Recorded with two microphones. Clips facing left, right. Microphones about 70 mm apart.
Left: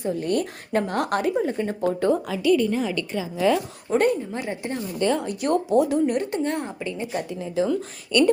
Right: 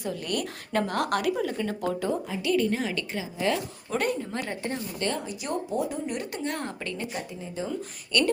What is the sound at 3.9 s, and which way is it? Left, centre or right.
Speech, left.